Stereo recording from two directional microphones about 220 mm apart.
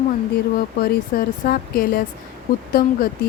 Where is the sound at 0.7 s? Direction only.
40° left (ahead or behind).